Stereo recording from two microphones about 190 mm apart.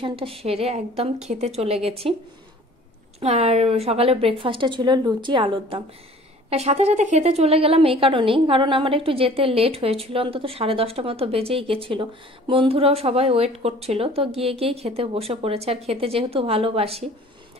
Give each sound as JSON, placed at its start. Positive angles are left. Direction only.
{"t": 0.0, "sound": "a woman's voice", "side_deg": -30}
{"t": 3.2, "sound": "a woman's voice", "side_deg": -35}